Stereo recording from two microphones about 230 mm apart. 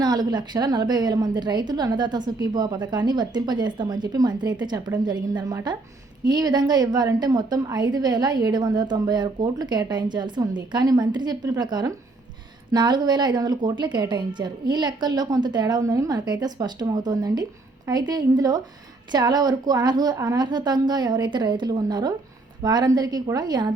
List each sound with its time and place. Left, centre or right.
0.0 s a woman's voice: centre